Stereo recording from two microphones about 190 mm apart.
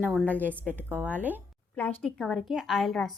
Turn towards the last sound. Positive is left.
turn(degrees=0)  # may be behind; listen again after turning